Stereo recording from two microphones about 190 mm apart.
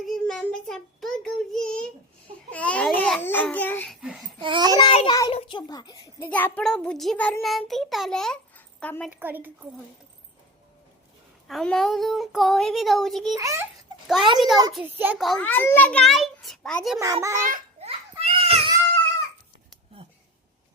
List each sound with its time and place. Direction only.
0.0 s child singing: centre (ahead or behind)
2.5 s babbling: 5° left (ahead or behind)
4.0 s babbling: centre (ahead or behind)
4.4 s babbling: 25° right (ahead or behind)
4.8 s a sound: 25° left (ahead or behind)
6.2 s a child's voice: 10° left (ahead or behind)
9.0 s a woman's voice: 10° right (ahead or behind)
11.4 s a child's voice: centre (ahead or behind)
13.3 s a woman's voice: 15° right (ahead or behind)
14.3 s a child's voice: centre (ahead or behind)
17.0 s a woman's voice: 15° right (ahead or behind)
17.8 s a sound: 35° right (ahead or behind)
18.1 s children playing: 30° right (ahead or behind)